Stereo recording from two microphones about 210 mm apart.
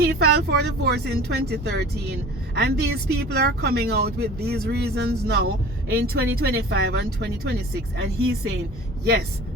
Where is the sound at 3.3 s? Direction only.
50° right (ahead or behind).